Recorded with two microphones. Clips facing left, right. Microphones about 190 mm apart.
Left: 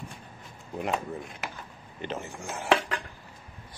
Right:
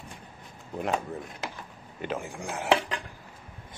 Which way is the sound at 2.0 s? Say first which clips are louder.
Right 2 dB; 10° right (ahead or behind).